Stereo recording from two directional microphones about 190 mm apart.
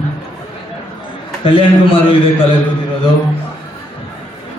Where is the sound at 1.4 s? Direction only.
30° left (ahead or behind).